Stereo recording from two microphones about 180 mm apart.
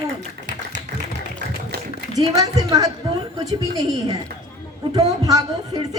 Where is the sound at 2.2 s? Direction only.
20° right (ahead or behind).